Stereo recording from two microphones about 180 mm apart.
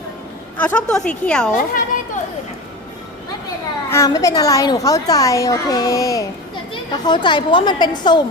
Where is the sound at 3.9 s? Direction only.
15° left (ahead or behind).